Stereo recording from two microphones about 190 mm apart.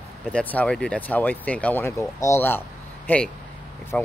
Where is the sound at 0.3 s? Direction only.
5° left (ahead or behind).